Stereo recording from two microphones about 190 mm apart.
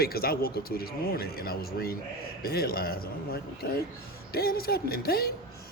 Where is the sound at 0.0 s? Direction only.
55° left (ahead or behind).